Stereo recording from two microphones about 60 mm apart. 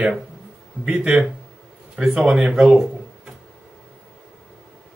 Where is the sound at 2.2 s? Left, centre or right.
Right.